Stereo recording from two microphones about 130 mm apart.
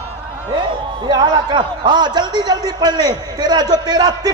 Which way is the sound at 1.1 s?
35° right (ahead or behind).